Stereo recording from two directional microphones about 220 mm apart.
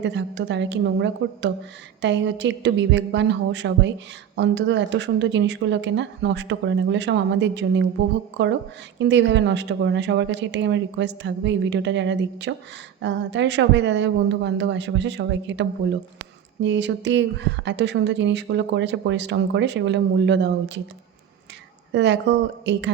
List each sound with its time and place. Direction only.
0.0 s speech: 55° right (ahead or behind)
21.9 s speech: 55° right (ahead or behind)